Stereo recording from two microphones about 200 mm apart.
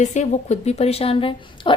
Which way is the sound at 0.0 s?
35° left (ahead or behind).